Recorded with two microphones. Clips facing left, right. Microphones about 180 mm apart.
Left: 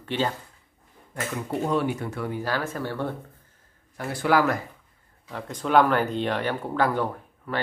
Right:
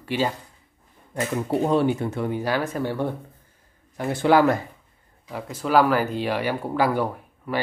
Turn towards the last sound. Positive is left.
turn(degrees=-10)  # may be behind; listen again after turning